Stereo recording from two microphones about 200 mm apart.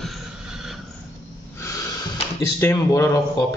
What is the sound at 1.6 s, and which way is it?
Snort, 15° left (ahead or behind).